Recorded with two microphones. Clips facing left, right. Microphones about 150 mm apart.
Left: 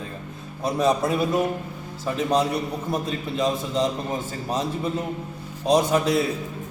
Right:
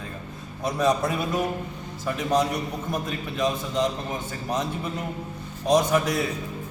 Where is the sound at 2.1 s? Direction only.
25° left (ahead or behind).